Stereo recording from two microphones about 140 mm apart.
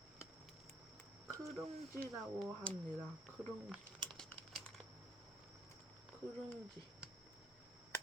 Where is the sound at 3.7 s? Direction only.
Centre (ahead or behind).